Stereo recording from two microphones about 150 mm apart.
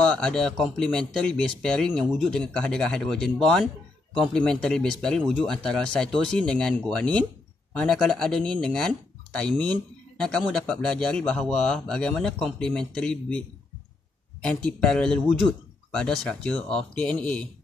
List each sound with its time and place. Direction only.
0.0 s speech: 5° left (ahead or behind)
14.4 s speech: 5° left (ahead or behind)